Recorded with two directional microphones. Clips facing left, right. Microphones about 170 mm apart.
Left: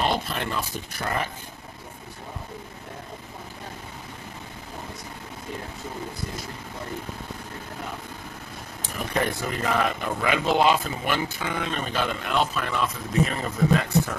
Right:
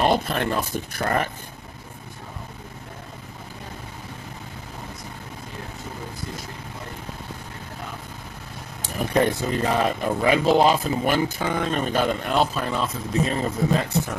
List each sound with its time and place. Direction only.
0.0 s speech: 50° right (ahead or behind)
8.8 s speech: 35° right (ahead or behind)